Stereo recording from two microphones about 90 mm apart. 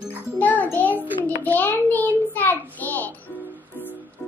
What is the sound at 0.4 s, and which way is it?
Music, 20° left (ahead or behind).